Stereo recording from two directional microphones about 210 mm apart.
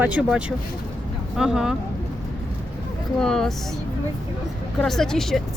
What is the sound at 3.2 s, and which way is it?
Speech, centre (ahead or behind).